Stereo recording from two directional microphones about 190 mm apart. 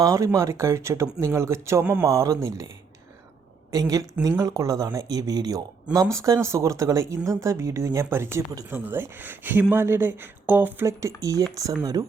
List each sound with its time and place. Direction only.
0.0 s speech: 15° right (ahead or behind)
3.7 s speech: 20° right (ahead or behind)